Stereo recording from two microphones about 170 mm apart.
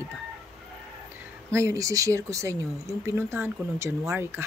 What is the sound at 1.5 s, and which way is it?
Speech, 20° right (ahead or behind).